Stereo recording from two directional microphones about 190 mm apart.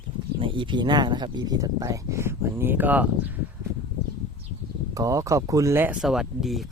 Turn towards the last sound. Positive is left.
turn(degrees=0)  # may be behind; listen again after turning